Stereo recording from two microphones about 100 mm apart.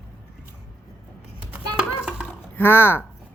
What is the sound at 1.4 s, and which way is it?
Children playing, 15° right (ahead or behind).